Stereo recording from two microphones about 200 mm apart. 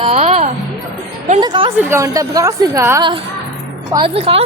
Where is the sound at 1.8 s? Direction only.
10° right (ahead or behind); by 4.4 s 30° right (ahead or behind).